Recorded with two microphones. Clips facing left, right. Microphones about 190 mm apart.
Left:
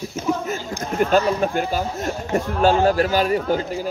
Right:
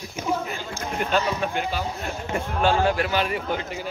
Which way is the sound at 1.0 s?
45° left (ahead or behind).